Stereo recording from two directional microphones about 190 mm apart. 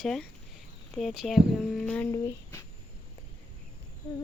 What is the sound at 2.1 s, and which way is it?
Speech, 15° left (ahead or behind).